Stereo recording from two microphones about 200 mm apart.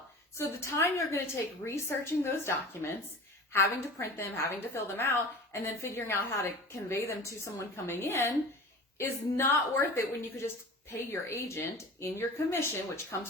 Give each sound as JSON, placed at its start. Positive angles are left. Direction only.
{"t": 0.3, "sound": "a woman's voice", "side_deg": 15}